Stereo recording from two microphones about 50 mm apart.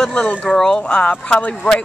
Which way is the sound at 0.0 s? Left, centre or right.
Centre.